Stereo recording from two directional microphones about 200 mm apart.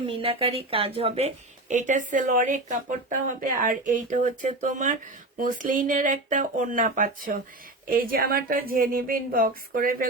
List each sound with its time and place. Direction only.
0.2 s a woman's voice: 30° right (ahead or behind); by 10.1 s 45° right (ahead or behind)